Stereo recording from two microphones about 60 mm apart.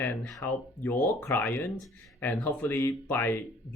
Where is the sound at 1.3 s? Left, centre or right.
Left.